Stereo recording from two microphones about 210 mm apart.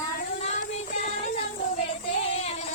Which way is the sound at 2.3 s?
30° left (ahead or behind).